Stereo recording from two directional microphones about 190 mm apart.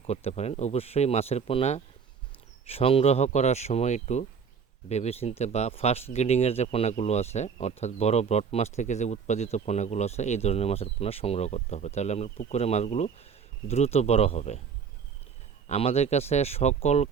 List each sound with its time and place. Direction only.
0.1 s speech: 35° left (ahead or behind)
15.6 s speech: 30° left (ahead or behind)